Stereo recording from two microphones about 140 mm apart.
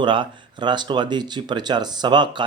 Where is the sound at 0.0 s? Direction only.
35° right (ahead or behind).